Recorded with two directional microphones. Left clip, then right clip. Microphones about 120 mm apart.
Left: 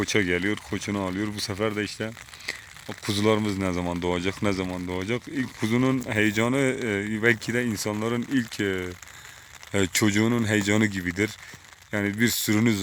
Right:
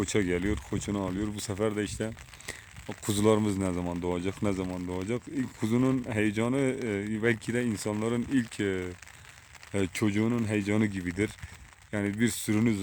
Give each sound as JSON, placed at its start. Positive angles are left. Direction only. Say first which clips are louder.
{"t": 0.0, "sound": "speech", "louder": "left 5 dB", "side_deg": -10}
{"t": 3.6, "sound": "speech", "louder": "left 5 dB", "side_deg": 0}
{"t": 9.7, "sound": "speech", "louder": "left 6 dB", "side_deg": 15}